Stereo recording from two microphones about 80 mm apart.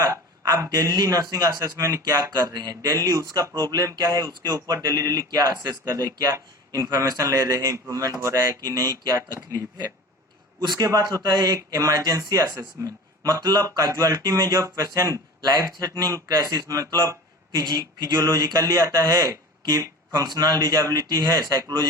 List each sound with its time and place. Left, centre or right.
0.0 s a sound: right
0.5 s speech: right
17.6 s speech: right
20.1 s speech: right